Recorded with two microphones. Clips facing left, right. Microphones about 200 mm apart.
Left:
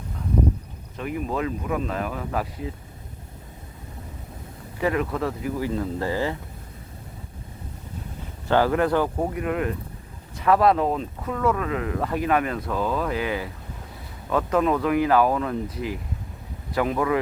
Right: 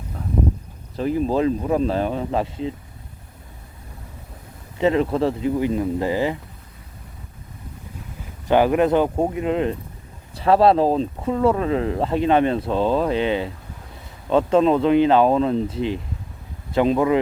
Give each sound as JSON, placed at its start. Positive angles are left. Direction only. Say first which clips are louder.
{"t": 0.9, "sound": "speech", "louder": "right 7 dB", "side_deg": -30}
{"t": 4.8, "sound": "speech", "louder": "right 6 dB", "side_deg": -25}
{"t": 8.4, "sound": "speech", "louder": "right 4 dB", "side_deg": -15}